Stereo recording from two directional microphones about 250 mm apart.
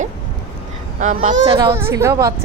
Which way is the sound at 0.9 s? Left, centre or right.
Right.